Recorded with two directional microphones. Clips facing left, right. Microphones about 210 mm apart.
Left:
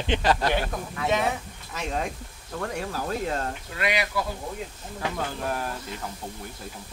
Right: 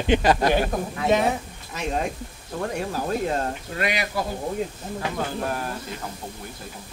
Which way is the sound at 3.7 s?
45° right (ahead or behind).